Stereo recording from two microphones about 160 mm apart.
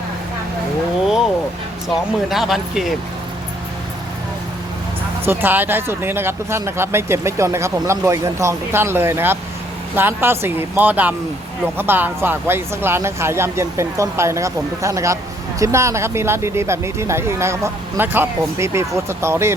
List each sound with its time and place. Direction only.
2.3 s speech: centre (ahead or behind)
5.2 s speech: 15° right (ahead or behind)